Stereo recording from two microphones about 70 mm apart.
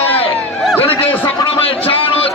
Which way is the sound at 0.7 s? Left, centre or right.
Left.